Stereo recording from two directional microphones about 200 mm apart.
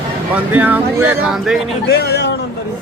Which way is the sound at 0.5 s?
10° right (ahead or behind).